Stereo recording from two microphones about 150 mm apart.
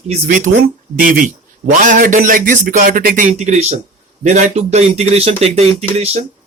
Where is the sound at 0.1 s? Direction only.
55° right (ahead or behind).